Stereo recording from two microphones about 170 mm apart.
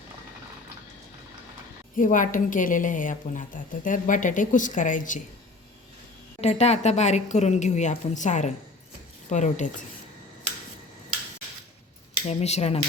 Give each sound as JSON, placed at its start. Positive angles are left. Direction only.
{"t": 2.0, "sound": "a woman's voice", "side_deg": 50}
{"t": 6.4, "sound": "a woman's voice", "side_deg": 40}
{"t": 12.3, "sound": "speech", "side_deg": 40}